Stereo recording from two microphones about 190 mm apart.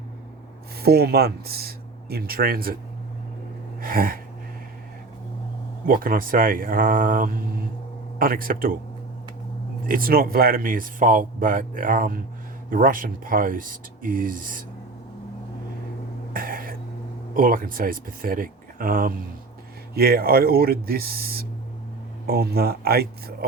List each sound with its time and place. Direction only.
0.8 s speech: 55° right (ahead or behind)
3.8 s gasp: 50° right (ahead or behind)
5.8 s speech: 50° right (ahead or behind)
9.8 s speech: 50° right (ahead or behind)
16.3 s throat clearing: 50° right (ahead or behind)
17.3 s speech: 50° right (ahead or behind)